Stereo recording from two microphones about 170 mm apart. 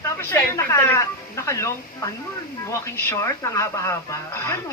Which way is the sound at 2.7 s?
15° left (ahead or behind).